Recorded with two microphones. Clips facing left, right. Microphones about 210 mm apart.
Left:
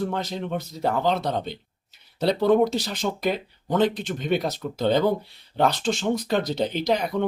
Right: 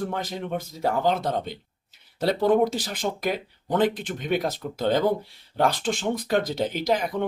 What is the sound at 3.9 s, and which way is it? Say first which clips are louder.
Speech: left 2 dB; 50° right (ahead or behind).